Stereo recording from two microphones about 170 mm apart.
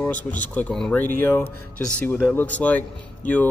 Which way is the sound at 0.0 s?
10° left (ahead or behind).